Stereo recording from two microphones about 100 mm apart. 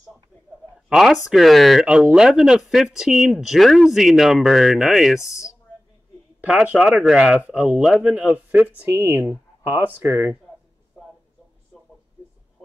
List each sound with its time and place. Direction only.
0.8 s speech: 5° right (ahead or behind)
1.9 s speech: 10° right (ahead or behind)